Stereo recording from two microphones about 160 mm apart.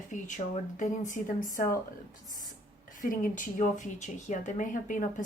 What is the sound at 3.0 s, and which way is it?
Speech, 60° left (ahead or behind).